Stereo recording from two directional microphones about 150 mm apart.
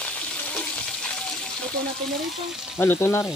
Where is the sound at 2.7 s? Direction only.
15° left (ahead or behind).